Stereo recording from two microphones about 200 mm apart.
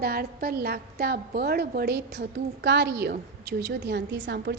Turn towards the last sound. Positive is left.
turn(degrees=-60)  # may be behind; listen again after turning